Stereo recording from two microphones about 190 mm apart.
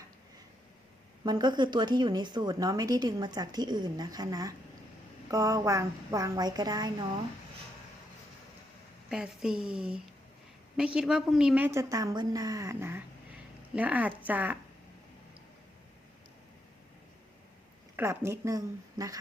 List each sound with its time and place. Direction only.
1.2 s a woman's voice: 20° right (ahead or behind)
9.0 s speech: 5° right (ahead or behind)
17.9 s speech: 15° right (ahead or behind)